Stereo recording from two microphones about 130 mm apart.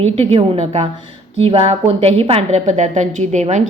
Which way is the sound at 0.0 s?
50° right (ahead or behind).